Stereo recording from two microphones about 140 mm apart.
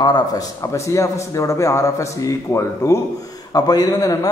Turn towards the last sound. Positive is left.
turn(degrees=25)  # may be behind; listen again after turning